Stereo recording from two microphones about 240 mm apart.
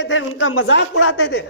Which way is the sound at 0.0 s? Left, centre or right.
Left.